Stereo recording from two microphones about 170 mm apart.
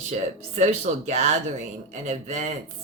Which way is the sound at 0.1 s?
45° right (ahead or behind).